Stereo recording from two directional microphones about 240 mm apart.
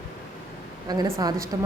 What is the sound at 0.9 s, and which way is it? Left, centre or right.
Speech, centre.